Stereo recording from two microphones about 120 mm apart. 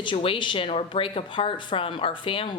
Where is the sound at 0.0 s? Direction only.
45° left (ahead or behind).